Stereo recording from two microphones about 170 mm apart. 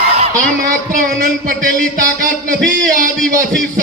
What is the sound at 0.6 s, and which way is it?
A man's voice, 50° right (ahead or behind).